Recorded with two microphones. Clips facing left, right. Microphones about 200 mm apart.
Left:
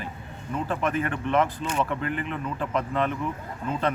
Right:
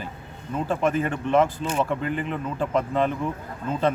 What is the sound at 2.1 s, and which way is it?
Speech, 35° right (ahead or behind).